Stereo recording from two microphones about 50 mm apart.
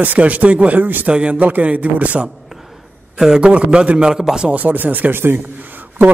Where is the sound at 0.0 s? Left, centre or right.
Right.